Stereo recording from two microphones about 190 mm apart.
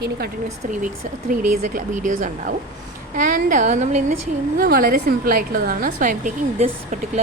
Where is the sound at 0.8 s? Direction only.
45° right (ahead or behind).